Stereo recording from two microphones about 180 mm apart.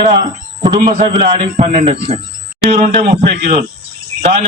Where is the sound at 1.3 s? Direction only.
40° right (ahead or behind).